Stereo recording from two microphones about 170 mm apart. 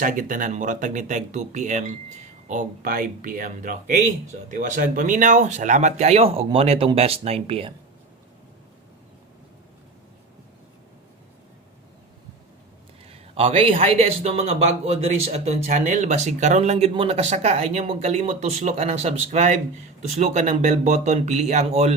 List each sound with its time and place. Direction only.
0.0 s a man's voice: 50° right (ahead or behind); by 7.7 s 35° right (ahead or behind)
13.1 s a man's voice: 35° right (ahead or behind)